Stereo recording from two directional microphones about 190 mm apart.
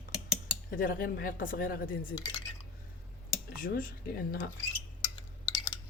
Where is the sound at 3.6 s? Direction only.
50° left (ahead or behind).